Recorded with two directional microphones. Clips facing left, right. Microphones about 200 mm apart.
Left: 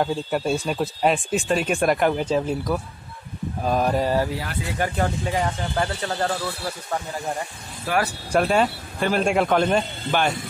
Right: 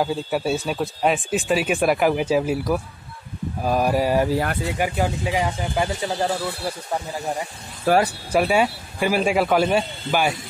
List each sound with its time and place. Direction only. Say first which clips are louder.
0.0 s speech: right 1 dB; 5° right (ahead or behind)
7.9 s speech: right 6 dB; 45° right (ahead or behind)
8.3 s speech: left 1 dB; 5° right (ahead or behind)